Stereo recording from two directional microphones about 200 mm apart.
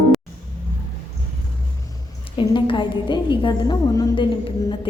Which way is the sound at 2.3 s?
25° left (ahead or behind).